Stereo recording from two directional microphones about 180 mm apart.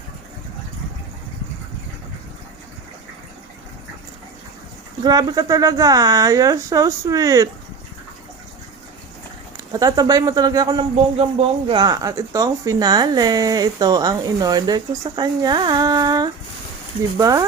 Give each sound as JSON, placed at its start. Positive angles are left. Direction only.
{"t": 5.0, "sound": "speech", "side_deg": -20}
{"t": 9.7, "sound": "speech", "side_deg": -20}
{"t": 10.9, "sound": "speech", "side_deg": -35}